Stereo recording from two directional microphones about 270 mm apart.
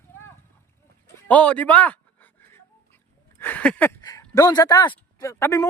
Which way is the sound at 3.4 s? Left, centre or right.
Centre.